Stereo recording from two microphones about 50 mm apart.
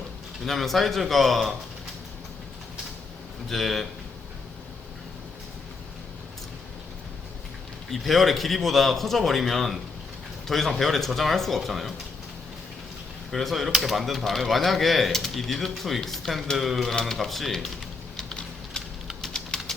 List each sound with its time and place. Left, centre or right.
0.4 s speech: centre
3.5 s speech: centre
7.9 s speech: centre
13.3 s speech: centre
18.2 s a sound: centre